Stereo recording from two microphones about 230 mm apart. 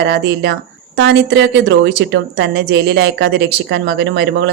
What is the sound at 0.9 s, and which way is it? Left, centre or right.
A woman's voice, right.